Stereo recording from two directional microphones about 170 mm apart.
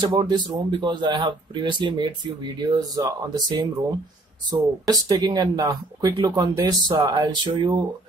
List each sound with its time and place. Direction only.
0.0 s speech: 25° right (ahead or behind)